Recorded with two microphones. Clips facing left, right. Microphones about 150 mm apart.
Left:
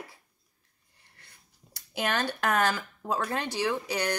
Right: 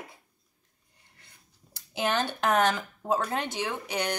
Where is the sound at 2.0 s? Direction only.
25° right (ahead or behind).